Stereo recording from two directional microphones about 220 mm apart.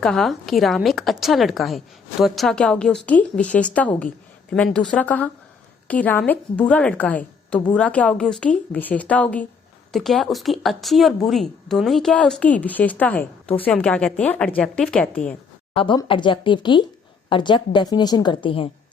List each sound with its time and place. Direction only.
0.0 s a woman's voice: centre (ahead or behind)
15.7 s a woman's voice: 25° left (ahead or behind)